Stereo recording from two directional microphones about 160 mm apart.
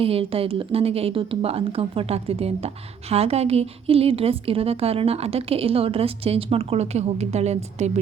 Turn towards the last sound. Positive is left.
turn(degrees=-45)  # may be behind; listen again after turning